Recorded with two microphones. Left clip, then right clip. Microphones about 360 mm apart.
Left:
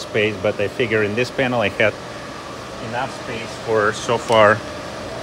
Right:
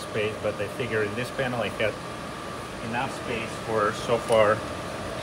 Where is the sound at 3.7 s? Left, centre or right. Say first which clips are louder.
Left 7 dB; left.